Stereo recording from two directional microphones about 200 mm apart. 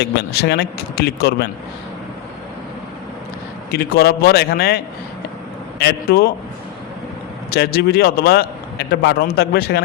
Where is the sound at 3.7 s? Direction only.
50° left (ahead or behind).